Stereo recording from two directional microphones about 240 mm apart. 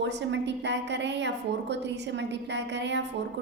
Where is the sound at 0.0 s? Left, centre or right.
Right.